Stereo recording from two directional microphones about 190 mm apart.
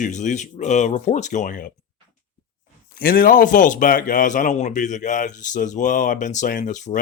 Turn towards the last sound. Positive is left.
turn(degrees=40)  # may be behind; listen again after turning